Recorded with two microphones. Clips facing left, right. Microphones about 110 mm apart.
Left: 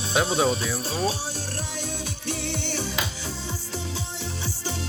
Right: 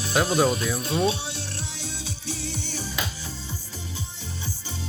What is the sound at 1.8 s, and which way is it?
Music, 60° left (ahead or behind).